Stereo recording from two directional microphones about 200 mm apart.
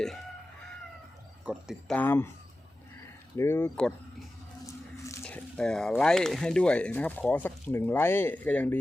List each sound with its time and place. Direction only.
1.5 s speech: 5° right (ahead or behind)
2.0 s speech: 10° left (ahead or behind)
3.3 s speech: 10° left (ahead or behind)
5.0 s speech: 10° left (ahead or behind)